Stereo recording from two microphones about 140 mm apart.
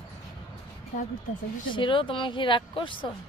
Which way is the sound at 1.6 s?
35° left (ahead or behind).